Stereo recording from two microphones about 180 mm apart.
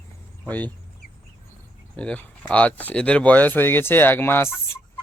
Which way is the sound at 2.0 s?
5° left (ahead or behind).